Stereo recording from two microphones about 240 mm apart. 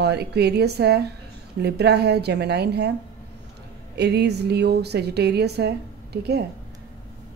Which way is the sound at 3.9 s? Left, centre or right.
Right.